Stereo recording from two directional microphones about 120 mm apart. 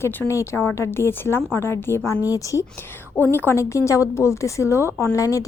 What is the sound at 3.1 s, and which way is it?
A woman's voice, 15° left (ahead or behind).